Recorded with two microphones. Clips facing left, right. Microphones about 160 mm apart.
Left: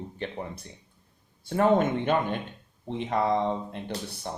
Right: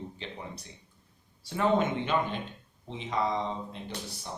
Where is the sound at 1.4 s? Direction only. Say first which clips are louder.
Left 4 dB; 50° left (ahead or behind).